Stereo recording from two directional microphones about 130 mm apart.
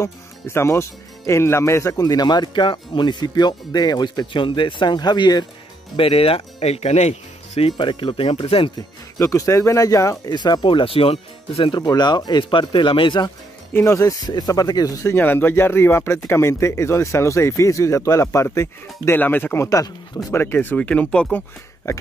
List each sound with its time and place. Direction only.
0.0 s speech: 20° left (ahead or behind)
5.9 s speech: 45° left (ahead or behind)
7.7 s speech: 35° left (ahead or behind)
9.2 s speech: 25° left (ahead or behind)
13.7 s speech: 25° left (ahead or behind)
15.1 s speech: 15° left (ahead or behind)